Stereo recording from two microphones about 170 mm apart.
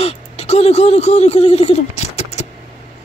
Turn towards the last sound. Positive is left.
turn(degrees=40)  # may be behind; listen again after turning